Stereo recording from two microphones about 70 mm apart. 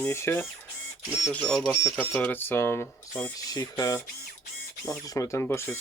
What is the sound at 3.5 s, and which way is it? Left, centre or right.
Speech, left.